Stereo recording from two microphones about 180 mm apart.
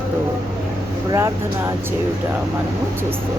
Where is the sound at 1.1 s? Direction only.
15° right (ahead or behind).